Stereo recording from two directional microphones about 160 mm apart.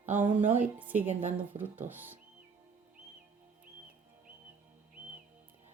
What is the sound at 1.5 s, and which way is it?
Speech, 40° right (ahead or behind).